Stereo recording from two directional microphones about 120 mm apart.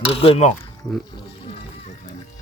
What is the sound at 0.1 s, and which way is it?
Pulleys, 55° left (ahead or behind).